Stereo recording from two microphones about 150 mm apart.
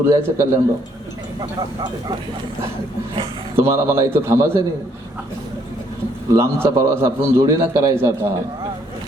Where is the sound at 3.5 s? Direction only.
15° right (ahead or behind).